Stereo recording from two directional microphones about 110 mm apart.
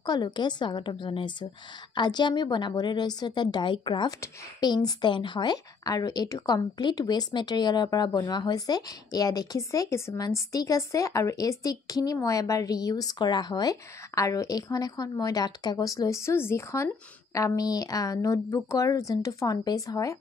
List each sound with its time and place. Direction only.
0.0 s a woman's voice: 40° left (ahead or behind)